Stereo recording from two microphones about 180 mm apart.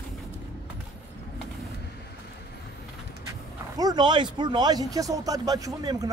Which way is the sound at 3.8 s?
20° right (ahead or behind).